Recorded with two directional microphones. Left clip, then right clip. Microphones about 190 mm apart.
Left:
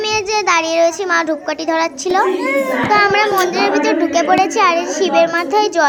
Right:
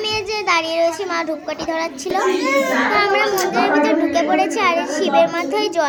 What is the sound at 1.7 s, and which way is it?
A child's voice, 30° left (ahead or behind).